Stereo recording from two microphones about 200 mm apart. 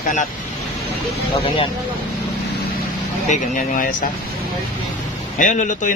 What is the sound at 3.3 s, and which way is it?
Speech, 45° left (ahead or behind).